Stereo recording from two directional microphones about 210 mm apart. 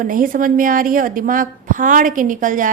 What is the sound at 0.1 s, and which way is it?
A woman's voice, 40° right (ahead or behind).